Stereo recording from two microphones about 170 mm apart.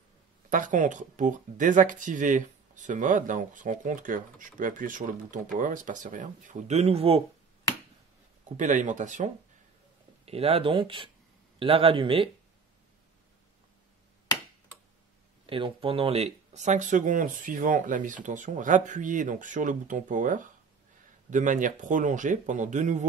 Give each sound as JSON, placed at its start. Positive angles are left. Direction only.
{"t": 0.5, "sound": "speech", "side_deg": -50}
{"t": 8.5, "sound": "speech", "side_deg": -45}
{"t": 10.2, "sound": "speech", "side_deg": -35}
{"t": 15.4, "sound": "speech", "side_deg": -30}